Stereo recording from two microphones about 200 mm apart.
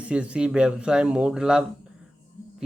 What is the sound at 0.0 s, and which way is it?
A man's voice, 5° right (ahead or behind).